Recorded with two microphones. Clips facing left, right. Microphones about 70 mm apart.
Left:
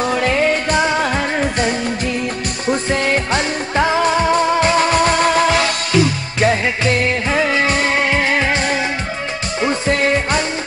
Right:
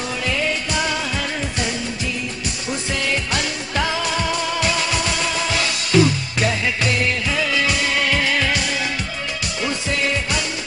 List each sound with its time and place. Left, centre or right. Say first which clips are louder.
0.0 s music: left 7 dB; left
6.4 s music: left 6 dB; left